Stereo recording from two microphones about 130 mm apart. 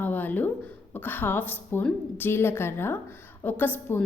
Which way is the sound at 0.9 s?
15° left (ahead or behind).